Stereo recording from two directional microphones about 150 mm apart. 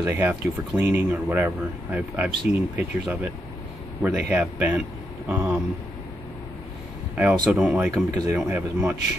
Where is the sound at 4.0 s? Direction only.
10° right (ahead or behind).